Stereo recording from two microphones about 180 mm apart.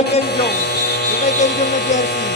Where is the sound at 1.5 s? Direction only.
65° left (ahead or behind).